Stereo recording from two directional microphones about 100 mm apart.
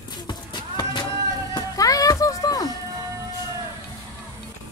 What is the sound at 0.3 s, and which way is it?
Horse, 50° left (ahead or behind).